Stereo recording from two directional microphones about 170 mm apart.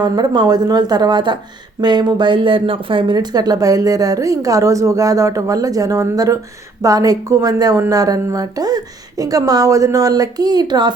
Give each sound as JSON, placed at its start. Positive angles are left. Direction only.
{"t": 0.0, "sound": "speech", "side_deg": -25}